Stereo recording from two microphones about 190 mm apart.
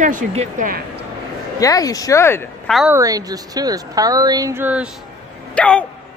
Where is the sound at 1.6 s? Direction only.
20° left (ahead or behind).